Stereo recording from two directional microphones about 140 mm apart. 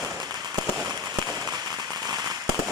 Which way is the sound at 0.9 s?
25° right (ahead or behind).